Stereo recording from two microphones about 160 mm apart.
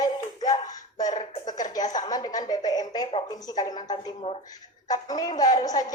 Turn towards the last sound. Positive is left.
turn(degrees=25)  # may be behind; listen again after turning